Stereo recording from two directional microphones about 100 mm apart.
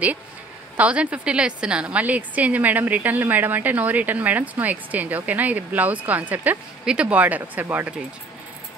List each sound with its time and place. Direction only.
0.7 s a woman's voice: 15° right (ahead or behind)